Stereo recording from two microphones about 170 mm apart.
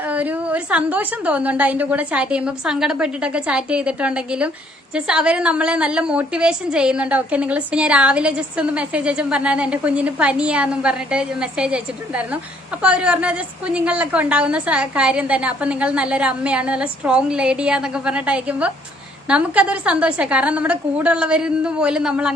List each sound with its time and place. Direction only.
0.0 s a woman's voice: 10° right (ahead or behind)